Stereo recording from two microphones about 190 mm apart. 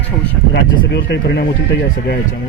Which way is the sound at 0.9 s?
65° left (ahead or behind).